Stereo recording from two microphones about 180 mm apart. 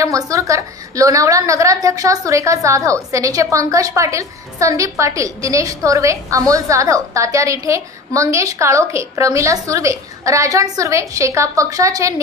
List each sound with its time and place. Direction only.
0.0 s a woman's voice: 15° right (ahead or behind)